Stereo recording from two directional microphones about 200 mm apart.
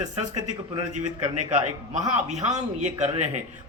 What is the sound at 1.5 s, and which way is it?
Speech, 35° right (ahead or behind).